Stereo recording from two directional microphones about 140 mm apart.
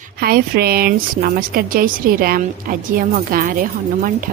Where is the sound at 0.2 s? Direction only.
90° right.